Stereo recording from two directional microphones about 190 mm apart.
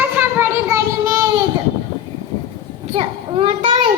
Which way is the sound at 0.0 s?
10° right (ahead or behind).